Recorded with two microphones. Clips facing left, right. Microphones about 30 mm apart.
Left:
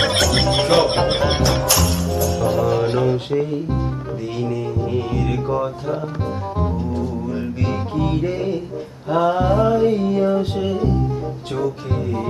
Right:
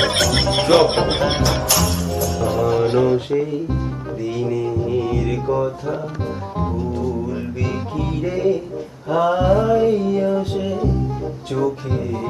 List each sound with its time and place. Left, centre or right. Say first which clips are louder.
0.0 s music: even; centre
4.2 s music: right 3 dB; left
8.0 s music: right 3 dB; left
9.0 s music: right 1 dB; left
10.6 s music: left 1 dB; left